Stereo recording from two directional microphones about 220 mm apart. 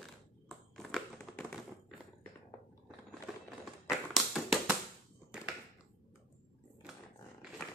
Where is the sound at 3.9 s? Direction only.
Centre (ahead or behind).